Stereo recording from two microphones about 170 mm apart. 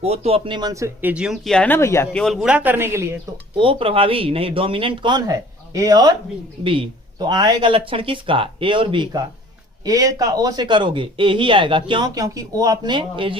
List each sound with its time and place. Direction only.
0.0 s a man's voice: 40° right (ahead or behind); by 1.1 s 20° right (ahead or behind)
1.1 s speech: 5° right (ahead or behind); by 2.0 s 15° left (ahead or behind)
2.1 s speech: centre (ahead or behind)
3.5 s a man's voice: 30° right (ahead or behind)